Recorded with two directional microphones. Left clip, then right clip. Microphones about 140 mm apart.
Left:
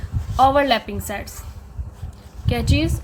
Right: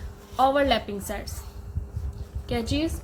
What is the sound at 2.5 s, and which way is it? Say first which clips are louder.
Speech: left 5 dB; 30° left (ahead or behind).